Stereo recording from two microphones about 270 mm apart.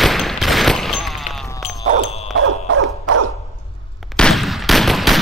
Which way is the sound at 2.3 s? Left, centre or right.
Right.